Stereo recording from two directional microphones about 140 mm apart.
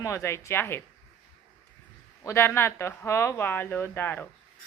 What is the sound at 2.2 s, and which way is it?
A woman's voice, 15° left (ahead or behind).